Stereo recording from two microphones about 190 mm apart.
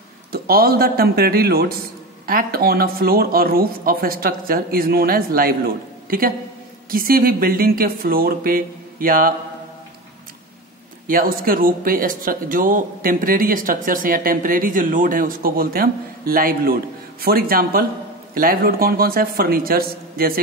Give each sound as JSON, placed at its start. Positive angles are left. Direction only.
{"t": 0.3, "sound": "speech", "side_deg": -50}
{"t": 11.1, "sound": "speech", "side_deg": -50}